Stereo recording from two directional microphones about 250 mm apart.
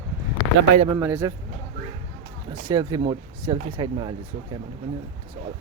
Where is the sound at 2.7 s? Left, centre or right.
Centre.